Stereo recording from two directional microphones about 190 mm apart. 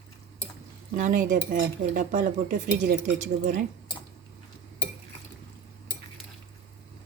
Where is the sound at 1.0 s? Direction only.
40° right (ahead or behind).